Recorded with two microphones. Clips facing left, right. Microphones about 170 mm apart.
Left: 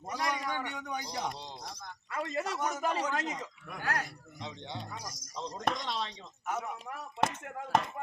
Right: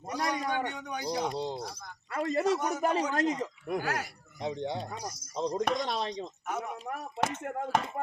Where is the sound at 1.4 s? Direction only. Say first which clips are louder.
Right 12 dB; 55° right (ahead or behind).